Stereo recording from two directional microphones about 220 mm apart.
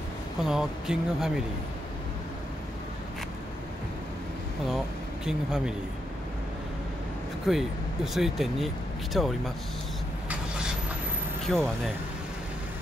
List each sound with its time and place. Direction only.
0.4 s speech: centre (ahead or behind)
4.6 s speech: centre (ahead or behind)
7.4 s speech: centre (ahead or behind)
11.4 s speech: centre (ahead or behind)